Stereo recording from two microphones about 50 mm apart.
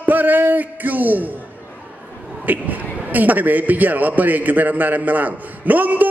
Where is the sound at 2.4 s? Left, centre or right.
Right.